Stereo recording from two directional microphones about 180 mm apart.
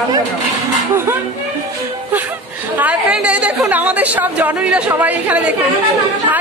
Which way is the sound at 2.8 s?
5° right (ahead or behind).